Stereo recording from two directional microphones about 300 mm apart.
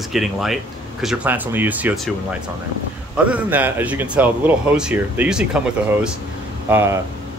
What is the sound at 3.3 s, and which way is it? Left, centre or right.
Speech, centre.